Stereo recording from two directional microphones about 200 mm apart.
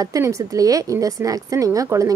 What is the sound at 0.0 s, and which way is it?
A woman's voice, 15° right (ahead or behind).